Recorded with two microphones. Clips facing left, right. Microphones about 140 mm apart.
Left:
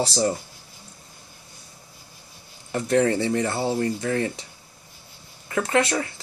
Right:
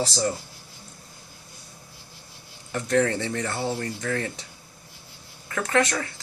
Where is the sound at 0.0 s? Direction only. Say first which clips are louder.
Left 3 dB; 25° left (ahead or behind).